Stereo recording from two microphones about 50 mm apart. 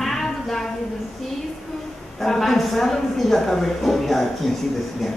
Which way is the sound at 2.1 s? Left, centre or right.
Centre.